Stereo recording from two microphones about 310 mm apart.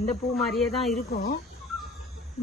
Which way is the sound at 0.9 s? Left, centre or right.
Left.